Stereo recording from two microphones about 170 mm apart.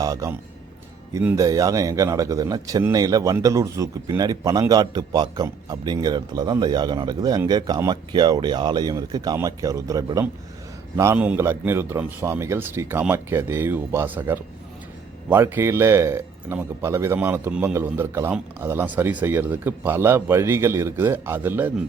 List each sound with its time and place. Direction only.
0.0 s a man's voice: 20° right (ahead or behind)
1.2 s speech: 10° right (ahead or behind)
1.5 s a man's voice: 20° right (ahead or behind)